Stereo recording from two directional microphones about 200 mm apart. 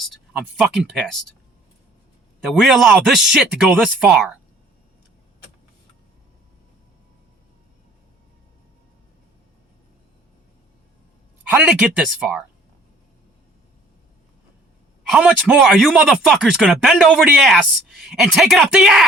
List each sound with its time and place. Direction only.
0.0 s speech: centre (ahead or behind)
2.4 s speech: centre (ahead or behind)
11.5 s speech: 5° right (ahead or behind)
15.1 s speech: 5° right (ahead or behind)